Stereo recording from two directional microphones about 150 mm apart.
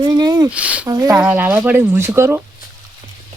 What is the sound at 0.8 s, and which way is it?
Speech, 20° right (ahead or behind).